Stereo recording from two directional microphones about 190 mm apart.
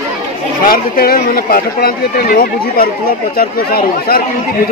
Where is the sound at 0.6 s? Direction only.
50° left (ahead or behind).